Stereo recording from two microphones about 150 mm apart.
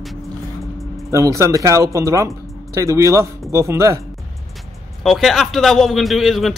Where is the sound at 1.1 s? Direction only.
20° right (ahead or behind).